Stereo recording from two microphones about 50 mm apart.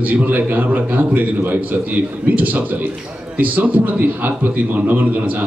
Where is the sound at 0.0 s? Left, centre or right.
Right.